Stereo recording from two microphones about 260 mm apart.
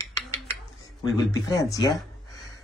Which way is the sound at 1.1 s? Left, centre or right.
Centre.